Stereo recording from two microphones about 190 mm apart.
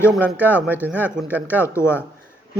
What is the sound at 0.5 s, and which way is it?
Speech, 10° right (ahead or behind).